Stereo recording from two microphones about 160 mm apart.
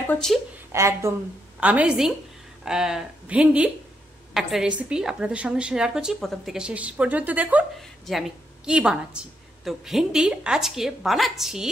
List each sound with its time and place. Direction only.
0.1 s a woman's voice: 5° left (ahead or behind)
0.7 s a woman's voice: 15° right (ahead or behind); by 11.7 s centre (ahead or behind)